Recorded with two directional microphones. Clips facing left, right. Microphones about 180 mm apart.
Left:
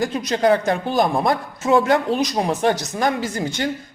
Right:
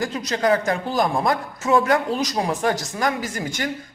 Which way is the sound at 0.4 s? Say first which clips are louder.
Left 2 dB; 25° left (ahead or behind).